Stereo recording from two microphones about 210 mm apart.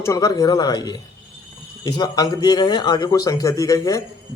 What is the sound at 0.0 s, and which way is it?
A man's voice, 15° left (ahead or behind).